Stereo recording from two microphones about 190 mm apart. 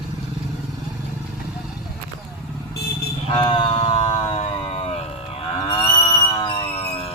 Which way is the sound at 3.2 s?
30° left (ahead or behind).